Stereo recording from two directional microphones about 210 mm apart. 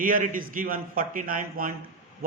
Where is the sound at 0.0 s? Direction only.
40° right (ahead or behind).